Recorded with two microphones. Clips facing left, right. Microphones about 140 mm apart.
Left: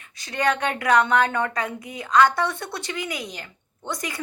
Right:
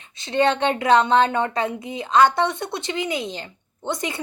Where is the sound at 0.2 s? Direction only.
25° right (ahead or behind).